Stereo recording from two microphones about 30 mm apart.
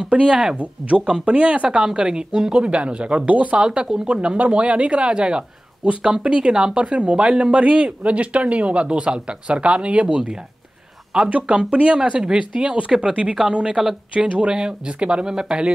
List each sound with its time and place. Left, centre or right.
0.0 s speech: right
2.0 s speech: right
2.5 s speech: right
3.3 s speech: right
3.5 s speech: right
4.4 s speech: right
7.0 s speech: right
7.6 s speech: right
11.4 s speech: right
12.0 s speech: right
14.1 s speech: right
14.5 s speech: right
14.9 s speech: right
15.2 s speech: right